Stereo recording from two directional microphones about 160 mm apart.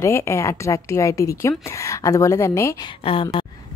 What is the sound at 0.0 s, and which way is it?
A woman's voice, 20° left (ahead or behind).